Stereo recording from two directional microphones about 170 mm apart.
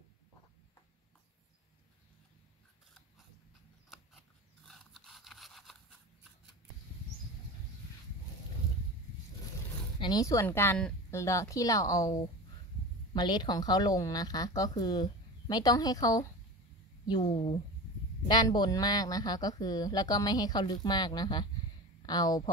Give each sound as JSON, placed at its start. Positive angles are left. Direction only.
{"t": 4.6, "sound": "scrape", "side_deg": 0}
{"t": 9.9, "sound": "a woman's voice", "side_deg": 25}